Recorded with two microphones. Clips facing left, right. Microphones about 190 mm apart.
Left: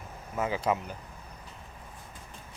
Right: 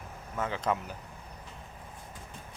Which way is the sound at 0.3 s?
10° left (ahead or behind).